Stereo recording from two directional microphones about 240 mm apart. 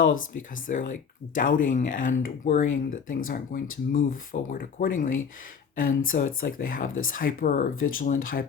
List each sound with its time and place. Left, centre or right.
0.0 s speech: left